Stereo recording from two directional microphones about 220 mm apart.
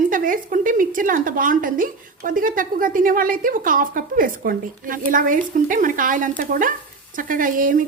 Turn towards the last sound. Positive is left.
turn(degrees=-40)  # may be behind; listen again after turning